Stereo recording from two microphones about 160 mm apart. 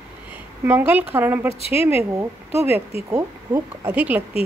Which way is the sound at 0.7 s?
10° right (ahead or behind).